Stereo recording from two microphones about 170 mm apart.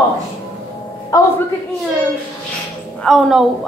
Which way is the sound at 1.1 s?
20° left (ahead or behind).